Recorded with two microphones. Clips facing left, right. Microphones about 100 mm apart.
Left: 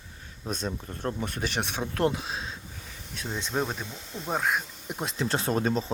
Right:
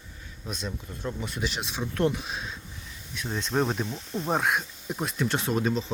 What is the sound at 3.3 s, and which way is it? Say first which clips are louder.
Speech: right 2 dB; 15° left (ahead or behind).